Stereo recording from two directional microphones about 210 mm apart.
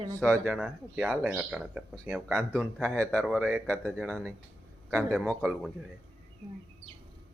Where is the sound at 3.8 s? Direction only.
5° left (ahead or behind).